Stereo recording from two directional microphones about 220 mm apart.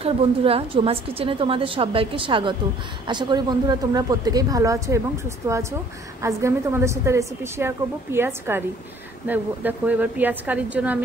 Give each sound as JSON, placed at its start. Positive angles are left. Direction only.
{"t": 0.0, "sound": "a woman's voice", "side_deg": -25}